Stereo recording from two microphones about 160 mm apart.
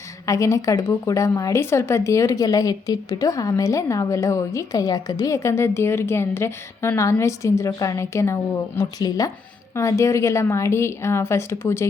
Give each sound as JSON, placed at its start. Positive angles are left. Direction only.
{"t": 0.3, "sound": "a woman's voice", "side_deg": 20}